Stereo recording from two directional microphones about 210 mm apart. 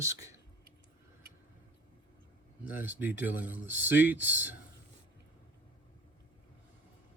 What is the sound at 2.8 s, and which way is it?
Speech, 10° right (ahead or behind).